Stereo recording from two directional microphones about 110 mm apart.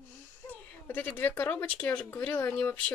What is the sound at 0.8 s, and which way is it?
Speech, 15° left (ahead or behind).